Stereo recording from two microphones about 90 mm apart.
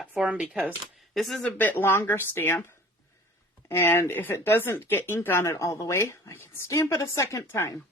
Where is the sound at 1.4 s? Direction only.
20° left (ahead or behind); by 7.4 s 35° left (ahead or behind).